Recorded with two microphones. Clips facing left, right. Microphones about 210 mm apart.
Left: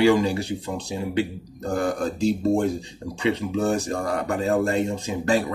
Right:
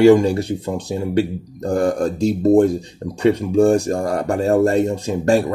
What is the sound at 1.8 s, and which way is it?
Speech, 45° right (ahead or behind).